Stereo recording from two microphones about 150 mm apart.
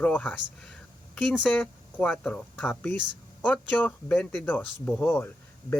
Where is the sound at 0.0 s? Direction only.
10° left (ahead or behind).